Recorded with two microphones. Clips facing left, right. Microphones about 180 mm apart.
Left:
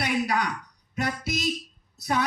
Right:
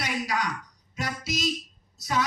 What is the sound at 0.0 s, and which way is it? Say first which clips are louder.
A woman's voice: left 4 dB; 60° left (ahead or behind).